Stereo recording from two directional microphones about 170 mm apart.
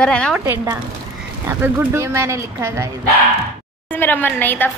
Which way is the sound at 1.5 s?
10° right (ahead or behind).